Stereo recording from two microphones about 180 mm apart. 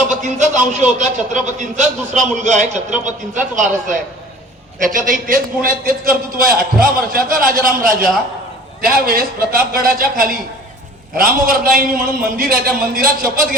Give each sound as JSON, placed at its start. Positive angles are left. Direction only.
{"t": 0.1, "sound": "a man's voice", "side_deg": -45}